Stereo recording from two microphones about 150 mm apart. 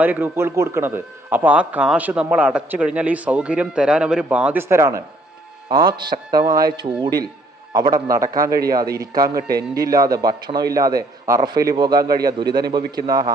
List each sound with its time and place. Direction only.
0.0 s a man's voice: 10° right (ahead or behind)